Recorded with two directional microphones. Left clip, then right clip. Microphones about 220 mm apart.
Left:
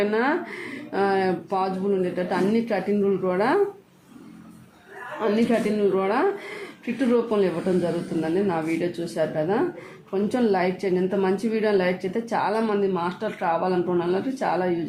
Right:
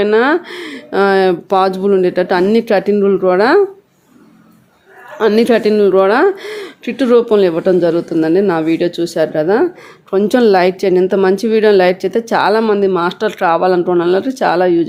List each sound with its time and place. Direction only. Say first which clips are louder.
0.0 s speech: right 11 dB; 40° right (ahead or behind)
5.2 s a woman's voice: right 12 dB; 45° right (ahead or behind)